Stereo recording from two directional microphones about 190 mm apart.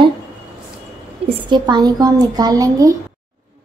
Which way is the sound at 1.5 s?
20° right (ahead or behind).